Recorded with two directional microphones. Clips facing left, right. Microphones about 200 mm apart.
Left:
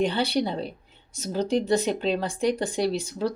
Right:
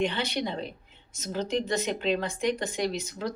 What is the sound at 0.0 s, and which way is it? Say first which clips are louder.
Speech: left 5 dB; 35° left (ahead or behind).